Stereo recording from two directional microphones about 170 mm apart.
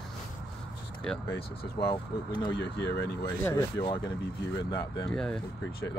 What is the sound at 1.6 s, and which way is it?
Speech, 30° left (ahead or behind).